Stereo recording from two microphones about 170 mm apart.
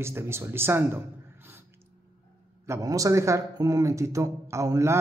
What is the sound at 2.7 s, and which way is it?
Speech, 20° right (ahead or behind).